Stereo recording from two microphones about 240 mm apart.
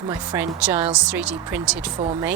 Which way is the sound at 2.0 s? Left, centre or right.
Centre.